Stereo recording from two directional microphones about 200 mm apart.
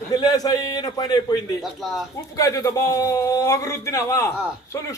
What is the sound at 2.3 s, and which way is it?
A man's voice, 15° left (ahead or behind).